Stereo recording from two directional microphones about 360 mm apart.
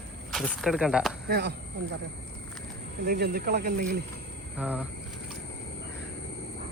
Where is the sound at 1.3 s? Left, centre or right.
Right.